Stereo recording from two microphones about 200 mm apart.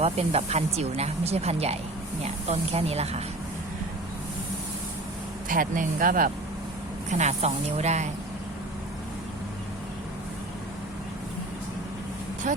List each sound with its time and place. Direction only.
0.0 s speech: 30° right (ahead or behind)
5.5 s speech: 45° right (ahead or behind)
12.4 s speech: 40° right (ahead or behind)